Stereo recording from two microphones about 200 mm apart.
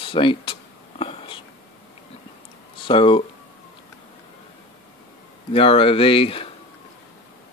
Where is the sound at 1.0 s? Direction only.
25° left (ahead or behind).